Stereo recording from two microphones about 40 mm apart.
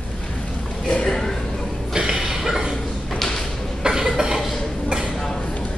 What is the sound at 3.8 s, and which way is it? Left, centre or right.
Cough, centre.